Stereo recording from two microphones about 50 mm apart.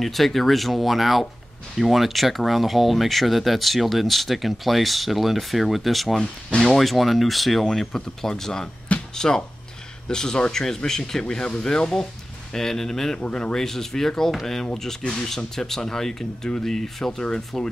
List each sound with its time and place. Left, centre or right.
0.0 s speech: centre
13.2 s speech: centre